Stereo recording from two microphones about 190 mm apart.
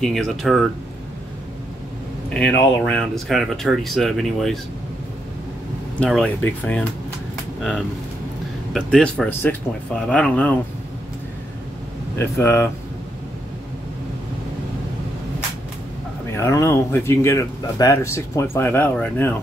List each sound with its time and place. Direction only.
0.0 s speech: centre (ahead or behind)
2.2 s speech: 5° left (ahead or behind)
5.9 s speech: 5° left (ahead or behind)
8.7 s speech: 5° left (ahead or behind)
12.2 s speech: 15° left (ahead or behind)
16.3 s speech: 15° left (ahead or behind)